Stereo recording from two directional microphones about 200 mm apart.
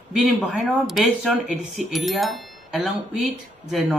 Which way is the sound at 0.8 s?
Centre (ahead or behind).